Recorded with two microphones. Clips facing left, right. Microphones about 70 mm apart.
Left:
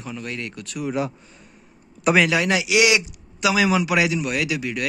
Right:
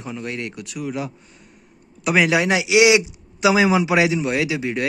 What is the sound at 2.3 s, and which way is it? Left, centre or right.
A man's voice, right.